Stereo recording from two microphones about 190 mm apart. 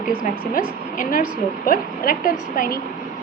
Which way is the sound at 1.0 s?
45° left (ahead or behind).